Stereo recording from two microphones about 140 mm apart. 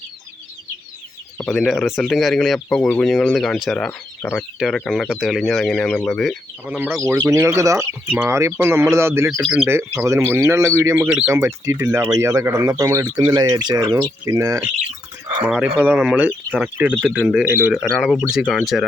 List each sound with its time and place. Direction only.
1.4 s speech: 5° left (ahead or behind)
6.7 s speech: 15° right (ahead or behind)
15.4 s speech: 10° right (ahead or behind)